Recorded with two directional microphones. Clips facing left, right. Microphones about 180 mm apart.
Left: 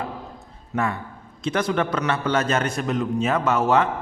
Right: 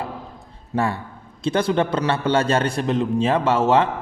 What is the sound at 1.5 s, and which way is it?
A man's voice, 30° right (ahead or behind).